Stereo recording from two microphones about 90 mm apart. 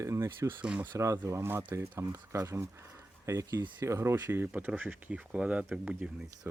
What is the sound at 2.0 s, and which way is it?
Speech, 40° right (ahead or behind).